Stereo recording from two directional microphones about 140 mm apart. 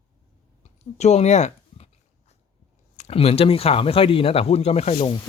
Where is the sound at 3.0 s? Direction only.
45° left (ahead or behind).